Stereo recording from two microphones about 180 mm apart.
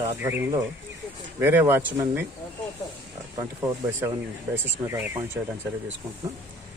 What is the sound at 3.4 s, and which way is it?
Speech, 20° right (ahead or behind).